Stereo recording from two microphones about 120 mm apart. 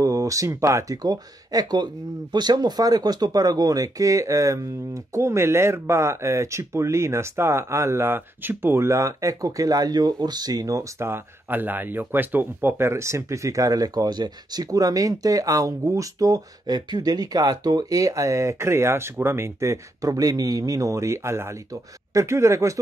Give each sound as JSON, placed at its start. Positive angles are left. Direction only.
{"t": 0.0, "sound": "speech", "side_deg": -30}